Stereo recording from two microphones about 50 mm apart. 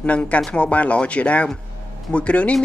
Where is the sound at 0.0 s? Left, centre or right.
Left.